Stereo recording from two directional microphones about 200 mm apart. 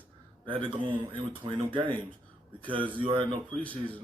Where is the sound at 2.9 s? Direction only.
25° right (ahead or behind).